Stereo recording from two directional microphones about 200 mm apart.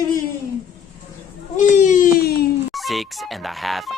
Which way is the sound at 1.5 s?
40° left (ahead or behind).